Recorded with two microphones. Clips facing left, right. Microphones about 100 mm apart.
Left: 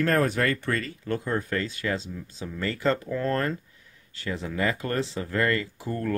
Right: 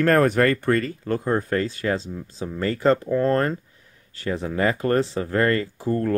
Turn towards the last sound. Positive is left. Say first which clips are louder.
# right 7 dB
turn(degrees=-35)  # may be behind; listen again after turning